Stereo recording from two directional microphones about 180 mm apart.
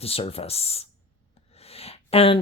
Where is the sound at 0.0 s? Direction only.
35° left (ahead or behind).